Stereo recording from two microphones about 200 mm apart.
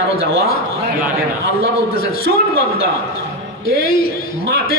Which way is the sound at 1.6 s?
50° left (ahead or behind).